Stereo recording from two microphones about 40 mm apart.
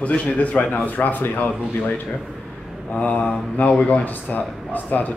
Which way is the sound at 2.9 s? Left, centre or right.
Left.